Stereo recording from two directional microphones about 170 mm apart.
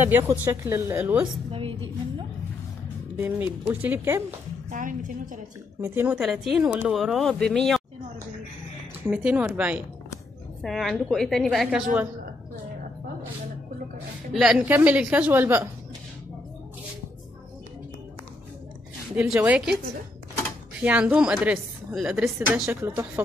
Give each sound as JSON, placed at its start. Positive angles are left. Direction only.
{"t": 0.0, "sound": "a woman's voice", "side_deg": -10}
{"t": 3.3, "sound": "a woman's voice", "side_deg": -10}
{"t": 4.6, "sound": "a woman's voice", "side_deg": -50}
{"t": 5.8, "sound": "a woman's voice", "side_deg": -10}
{"t": 9.1, "sound": "a woman's voice", "side_deg": -10}
{"t": 14.3, "sound": "a woman's voice", "side_deg": -5}
{"t": 19.1, "sound": "a woman's voice", "side_deg": -5}
{"t": 20.8, "sound": "a woman's voice", "side_deg": -5}